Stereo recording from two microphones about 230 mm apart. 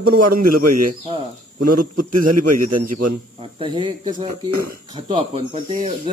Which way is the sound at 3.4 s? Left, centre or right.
Right.